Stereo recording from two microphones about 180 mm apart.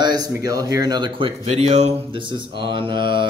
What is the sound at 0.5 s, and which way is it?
Speech, 20° right (ahead or behind).